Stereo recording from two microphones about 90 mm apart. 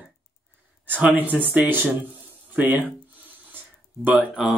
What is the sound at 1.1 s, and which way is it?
Speech, 20° right (ahead or behind).